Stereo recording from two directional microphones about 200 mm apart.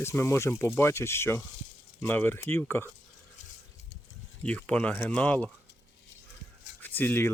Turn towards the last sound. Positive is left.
turn(degrees=10)  # may be behind; listen again after turning